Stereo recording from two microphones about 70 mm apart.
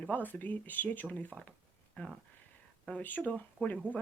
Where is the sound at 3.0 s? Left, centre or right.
Left.